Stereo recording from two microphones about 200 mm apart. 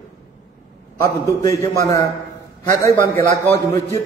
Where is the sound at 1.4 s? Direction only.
15° left (ahead or behind).